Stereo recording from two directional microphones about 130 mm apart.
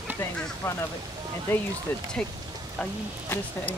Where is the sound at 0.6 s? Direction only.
20° left (ahead or behind).